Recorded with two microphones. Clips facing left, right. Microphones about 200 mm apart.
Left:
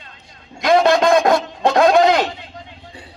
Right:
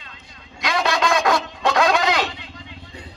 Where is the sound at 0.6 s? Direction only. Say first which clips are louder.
Left 8 dB; 55° left (ahead or behind).